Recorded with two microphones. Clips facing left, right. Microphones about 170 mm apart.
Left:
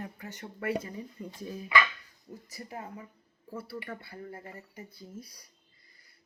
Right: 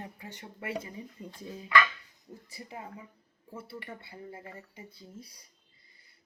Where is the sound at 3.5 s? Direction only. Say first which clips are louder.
Left 3 dB; 25° right (ahead or behind).